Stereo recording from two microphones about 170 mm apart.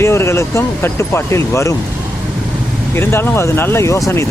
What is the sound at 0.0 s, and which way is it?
Speech, 15° left (ahead or behind).